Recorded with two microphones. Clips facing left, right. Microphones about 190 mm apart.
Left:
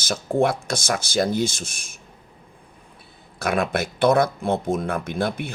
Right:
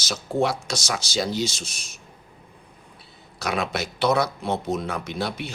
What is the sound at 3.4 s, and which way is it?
Speech, 55° left (ahead or behind).